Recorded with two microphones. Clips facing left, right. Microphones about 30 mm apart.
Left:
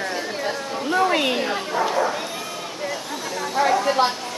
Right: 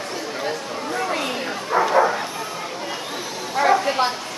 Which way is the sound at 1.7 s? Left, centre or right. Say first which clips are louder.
Right 4 dB; right.